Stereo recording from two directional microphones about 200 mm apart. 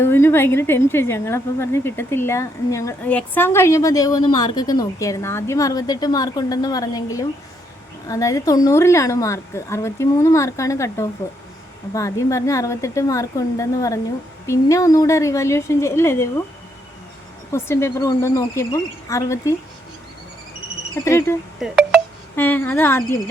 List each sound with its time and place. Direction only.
0.0 s a woman's voice: 10° left (ahead or behind)
17.5 s a woman's voice: 15° left (ahead or behind)
21.0 s a woman's voice: 15° left (ahead or behind)
21.6 s telephone dialing: 5° right (ahead or behind)
22.4 s a woman's voice: 10° left (ahead or behind)